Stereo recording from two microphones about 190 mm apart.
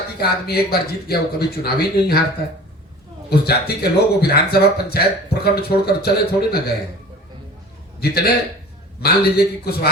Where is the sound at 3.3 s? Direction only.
55° left (ahead or behind).